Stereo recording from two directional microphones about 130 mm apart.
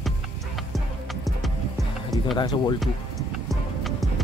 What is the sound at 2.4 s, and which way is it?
Speech, 35° left (ahead or behind).